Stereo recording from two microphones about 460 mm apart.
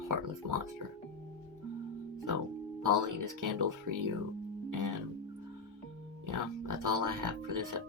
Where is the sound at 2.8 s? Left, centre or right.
Right.